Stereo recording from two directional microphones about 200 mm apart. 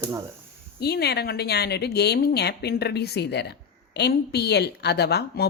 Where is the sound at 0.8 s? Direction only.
55° left (ahead or behind).